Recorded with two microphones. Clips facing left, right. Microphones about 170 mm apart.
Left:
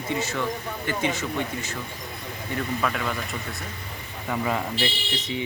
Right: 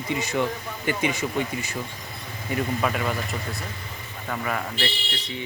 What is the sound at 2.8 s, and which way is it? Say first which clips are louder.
Speech: right 2 dB; 5° right (ahead or behind).